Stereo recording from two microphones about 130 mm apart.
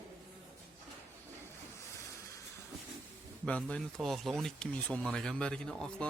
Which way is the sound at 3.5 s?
10° left (ahead or behind).